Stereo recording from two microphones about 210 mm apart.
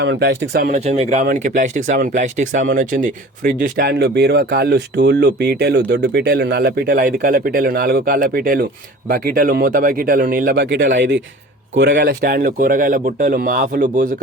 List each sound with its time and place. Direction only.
0.0 s speech: 55° right (ahead or behind)
0.7 s a man's voice: 35° right (ahead or behind); by 11.9 s 60° right (ahead or behind)
11.9 s speech: 45° right (ahead or behind)